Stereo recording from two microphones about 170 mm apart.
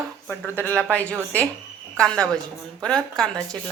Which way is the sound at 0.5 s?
10° left (ahead or behind).